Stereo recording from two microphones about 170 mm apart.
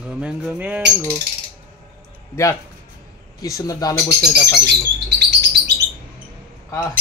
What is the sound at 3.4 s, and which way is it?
Speech, 20° left (ahead or behind).